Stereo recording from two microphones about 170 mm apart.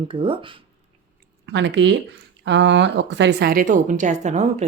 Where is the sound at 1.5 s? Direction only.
90° right; by 4.6 s 45° right (ahead or behind).